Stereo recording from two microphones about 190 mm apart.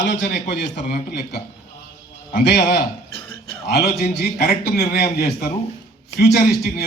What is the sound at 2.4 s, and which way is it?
Speech, 60° left (ahead or behind).